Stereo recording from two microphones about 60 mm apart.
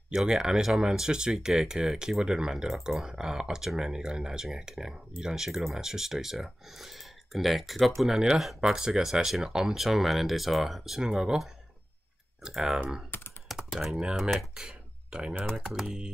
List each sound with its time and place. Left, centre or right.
0.1 s speech: centre
12.4 s speech: centre
13.1 s computer keyboard: left
13.7 s speech: centre
14.5 s a sound: centre
15.7 s speech: centre